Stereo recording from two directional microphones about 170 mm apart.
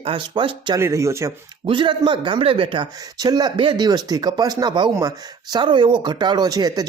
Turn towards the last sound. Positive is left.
turn(degrees=-20)  # may be behind; listen again after turning